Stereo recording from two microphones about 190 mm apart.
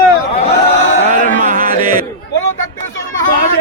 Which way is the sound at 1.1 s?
45° right (ahead or behind).